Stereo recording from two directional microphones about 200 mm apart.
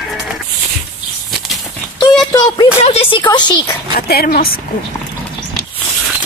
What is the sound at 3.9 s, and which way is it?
Speech, 50° left (ahead or behind).